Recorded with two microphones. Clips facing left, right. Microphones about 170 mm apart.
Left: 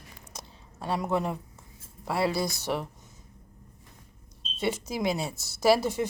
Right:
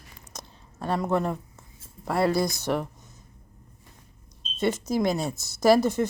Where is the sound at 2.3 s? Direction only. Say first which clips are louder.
Right 4 dB; 5° left (ahead or behind).